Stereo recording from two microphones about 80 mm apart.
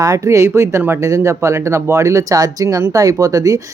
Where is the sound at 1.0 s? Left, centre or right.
Right.